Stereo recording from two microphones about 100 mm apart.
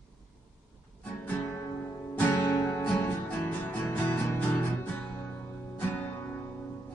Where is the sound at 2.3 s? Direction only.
30° left (ahead or behind).